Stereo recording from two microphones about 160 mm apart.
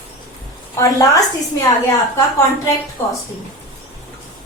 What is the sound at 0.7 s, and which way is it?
Speech, 20° left (ahead or behind).